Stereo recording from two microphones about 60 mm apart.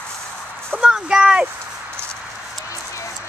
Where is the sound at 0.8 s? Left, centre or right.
Centre.